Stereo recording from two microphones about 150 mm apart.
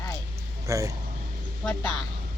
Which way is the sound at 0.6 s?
20° right (ahead or behind).